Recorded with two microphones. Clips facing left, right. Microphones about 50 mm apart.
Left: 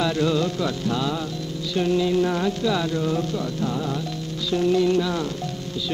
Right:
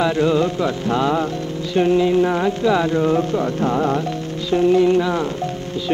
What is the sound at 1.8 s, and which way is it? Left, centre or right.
Music, right.